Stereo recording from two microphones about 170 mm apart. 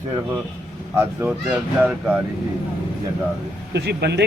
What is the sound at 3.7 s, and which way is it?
Speech, 75° right (ahead or behind).